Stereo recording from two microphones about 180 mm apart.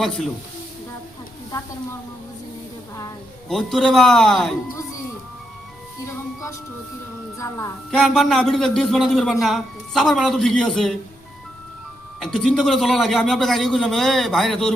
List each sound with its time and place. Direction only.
3.5 s a man's voice: centre (ahead or behind)
7.9 s a man's voice: centre (ahead or behind)
12.2 s a man's voice: centre (ahead or behind)